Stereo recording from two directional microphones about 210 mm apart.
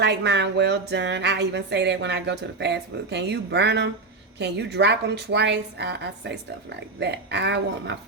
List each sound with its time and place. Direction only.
0.0 s a woman's voice: 55° right (ahead or behind)